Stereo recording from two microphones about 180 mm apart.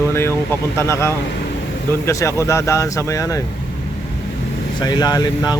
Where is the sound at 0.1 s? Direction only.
15° left (ahead or behind).